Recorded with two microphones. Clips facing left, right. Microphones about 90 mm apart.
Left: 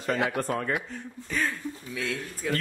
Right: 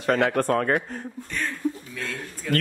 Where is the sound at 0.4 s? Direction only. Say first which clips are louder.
Right 7 dB; 65° right (ahead or behind).